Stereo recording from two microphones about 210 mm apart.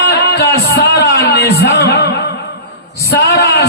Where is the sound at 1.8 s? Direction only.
50° left (ahead or behind).